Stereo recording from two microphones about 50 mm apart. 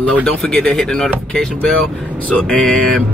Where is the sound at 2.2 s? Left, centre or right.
Left.